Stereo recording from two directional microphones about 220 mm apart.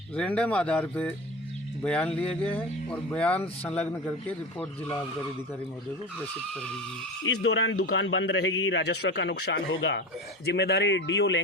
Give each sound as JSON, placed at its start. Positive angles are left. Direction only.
{"t": 0.2, "sound": "speech", "side_deg": 5}
{"t": 7.4, "sound": "a man's voice", "side_deg": 55}